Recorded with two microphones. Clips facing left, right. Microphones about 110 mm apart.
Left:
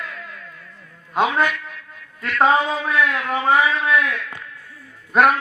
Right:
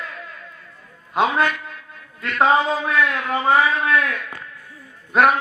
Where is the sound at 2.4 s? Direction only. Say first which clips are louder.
Even; 5° right (ahead or behind).